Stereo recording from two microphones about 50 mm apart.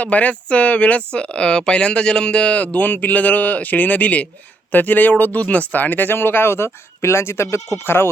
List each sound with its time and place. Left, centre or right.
0.0 s speech: left